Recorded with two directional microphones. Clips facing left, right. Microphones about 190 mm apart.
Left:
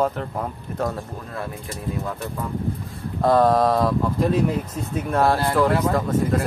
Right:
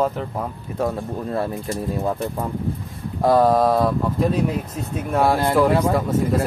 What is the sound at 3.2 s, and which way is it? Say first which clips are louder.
Speech: right 1 dB; 10° right (ahead or behind).